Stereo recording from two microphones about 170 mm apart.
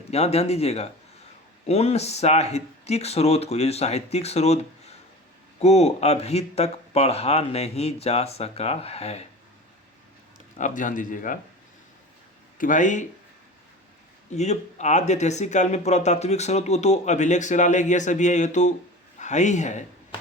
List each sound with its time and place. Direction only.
0.1 s speech: 40° left (ahead or behind)
10.6 s speech: 50° left (ahead or behind)
12.5 s speech: 50° left (ahead or behind)
14.3 s speech: 40° left (ahead or behind)